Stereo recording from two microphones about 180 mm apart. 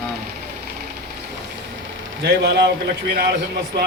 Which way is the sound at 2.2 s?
70° right (ahead or behind).